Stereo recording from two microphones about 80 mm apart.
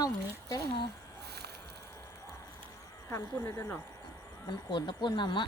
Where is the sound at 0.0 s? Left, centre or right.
Left.